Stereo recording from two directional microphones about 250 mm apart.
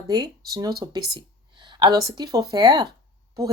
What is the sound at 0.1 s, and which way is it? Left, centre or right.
A woman's voice, centre.